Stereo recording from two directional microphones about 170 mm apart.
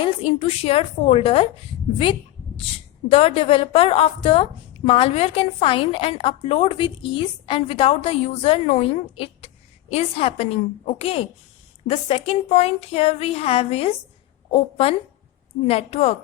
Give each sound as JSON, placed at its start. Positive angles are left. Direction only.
{"t": 0.0, "sound": "a woman's voice", "side_deg": 35}
{"t": 3.1, "sound": "a woman's voice", "side_deg": 35}